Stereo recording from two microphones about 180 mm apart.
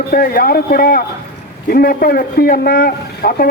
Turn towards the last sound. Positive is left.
turn(degrees=55)  # may be behind; listen again after turning